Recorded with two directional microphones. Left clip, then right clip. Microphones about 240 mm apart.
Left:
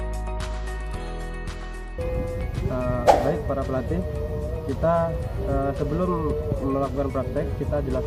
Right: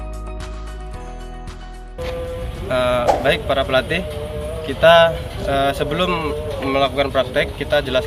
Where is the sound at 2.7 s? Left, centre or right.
Right.